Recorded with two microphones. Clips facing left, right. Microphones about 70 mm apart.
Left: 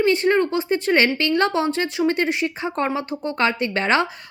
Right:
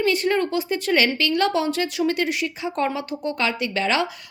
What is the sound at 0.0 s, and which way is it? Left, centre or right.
A woman's voice, left.